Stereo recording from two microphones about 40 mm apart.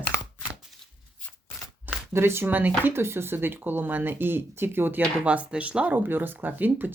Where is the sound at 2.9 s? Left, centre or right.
Right.